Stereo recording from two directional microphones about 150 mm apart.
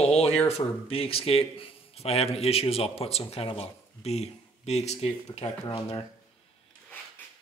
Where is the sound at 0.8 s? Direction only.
40° left (ahead or behind).